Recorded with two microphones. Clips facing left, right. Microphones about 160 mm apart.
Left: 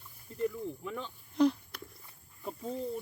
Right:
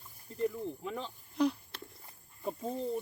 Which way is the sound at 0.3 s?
30° right (ahead or behind).